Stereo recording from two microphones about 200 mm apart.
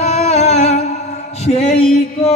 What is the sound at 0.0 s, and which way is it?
Music, 35° left (ahead or behind).